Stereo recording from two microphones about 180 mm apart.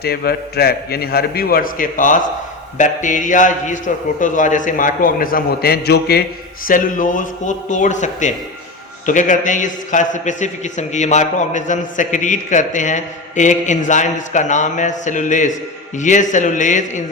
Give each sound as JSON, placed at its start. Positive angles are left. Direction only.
{"t": 0.0, "sound": "a man's voice", "side_deg": 60}
{"t": 6.7, "sound": "a man's voice", "side_deg": 45}